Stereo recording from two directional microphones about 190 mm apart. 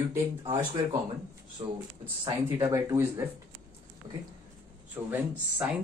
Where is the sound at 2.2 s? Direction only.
20° right (ahead or behind).